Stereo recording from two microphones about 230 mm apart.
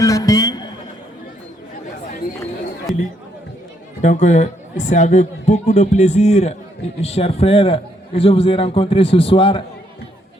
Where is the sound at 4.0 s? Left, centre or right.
Left.